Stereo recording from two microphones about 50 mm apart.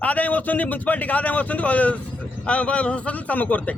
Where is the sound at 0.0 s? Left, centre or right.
Left.